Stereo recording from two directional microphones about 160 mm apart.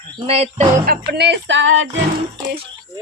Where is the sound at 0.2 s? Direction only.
40° right (ahead or behind).